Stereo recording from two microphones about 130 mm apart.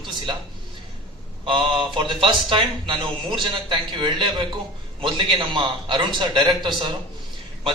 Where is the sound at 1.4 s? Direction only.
40° right (ahead or behind).